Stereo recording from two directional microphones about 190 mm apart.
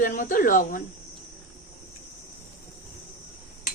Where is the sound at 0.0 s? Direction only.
45° left (ahead or behind).